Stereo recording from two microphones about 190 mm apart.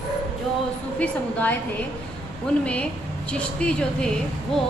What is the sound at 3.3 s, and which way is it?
Speech, 5° left (ahead or behind).